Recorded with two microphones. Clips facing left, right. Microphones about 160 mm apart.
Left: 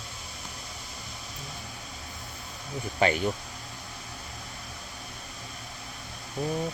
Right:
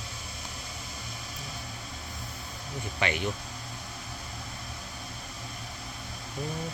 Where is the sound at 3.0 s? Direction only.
40° left (ahead or behind).